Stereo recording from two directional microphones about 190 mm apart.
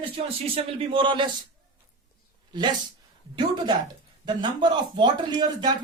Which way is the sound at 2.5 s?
20° right (ahead or behind).